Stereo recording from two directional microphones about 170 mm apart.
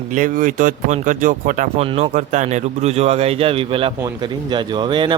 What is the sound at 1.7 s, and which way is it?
A man's voice, 35° right (ahead or behind).